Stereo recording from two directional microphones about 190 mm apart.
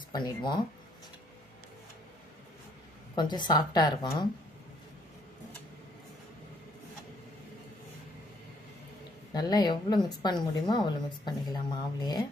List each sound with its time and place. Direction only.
0.1 s a woman's voice: 25° left (ahead or behind)
3.2 s a woman's voice: 25° left (ahead or behind)
9.3 s a woman's voice: 20° left (ahead or behind)